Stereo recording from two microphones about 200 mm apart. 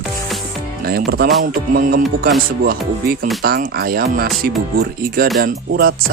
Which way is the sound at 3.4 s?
50° right (ahead or behind).